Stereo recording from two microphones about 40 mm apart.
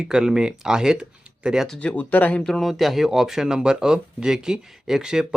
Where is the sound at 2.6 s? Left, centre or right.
Centre.